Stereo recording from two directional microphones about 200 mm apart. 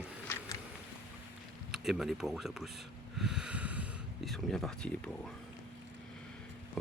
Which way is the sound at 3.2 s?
5° right (ahead or behind).